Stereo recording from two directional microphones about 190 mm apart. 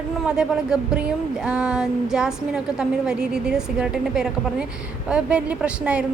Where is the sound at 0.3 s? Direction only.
5° right (ahead or behind).